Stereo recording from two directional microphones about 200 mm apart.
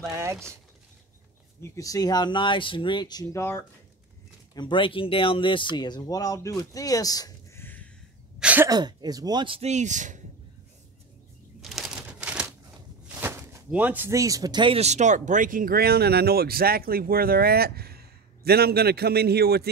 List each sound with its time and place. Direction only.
0.1 s speech: 15° right (ahead or behind)
1.6 s speech: 15° left (ahead or behind)
6.6 s a sound: 15° left (ahead or behind)
8.4 s speech: 5° right (ahead or behind)
8.6 s speech: 20° right (ahead or behind); by 10.2 s 40° right (ahead or behind)
11.6 s crumpling: centre (ahead or behind)
13.1 s speech: 10° right (ahead or behind); by 19.7 s 50° right (ahead or behind)